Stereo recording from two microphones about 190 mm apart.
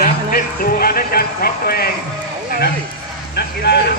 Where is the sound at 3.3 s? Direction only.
60° left (ahead or behind).